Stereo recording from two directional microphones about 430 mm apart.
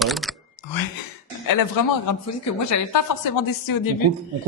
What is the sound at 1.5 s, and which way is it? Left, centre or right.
Speech, left.